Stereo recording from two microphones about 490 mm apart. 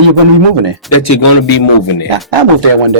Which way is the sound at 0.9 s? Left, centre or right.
Left.